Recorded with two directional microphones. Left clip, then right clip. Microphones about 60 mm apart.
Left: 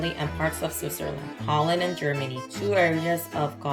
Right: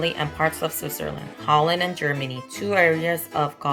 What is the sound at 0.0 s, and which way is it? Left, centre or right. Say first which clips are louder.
Speech: right 5 dB; right.